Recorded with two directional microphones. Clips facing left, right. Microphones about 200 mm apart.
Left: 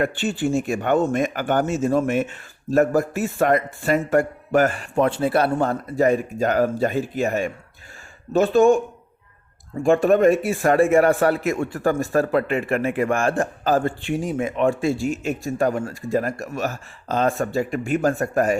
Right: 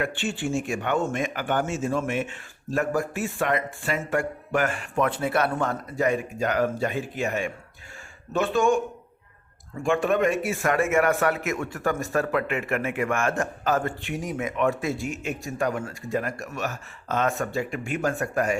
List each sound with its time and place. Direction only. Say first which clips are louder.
0.0 s speech: left 6 dB; 40° left (ahead or behind)
9.8 s speech: left 7 dB; 35° left (ahead or behind)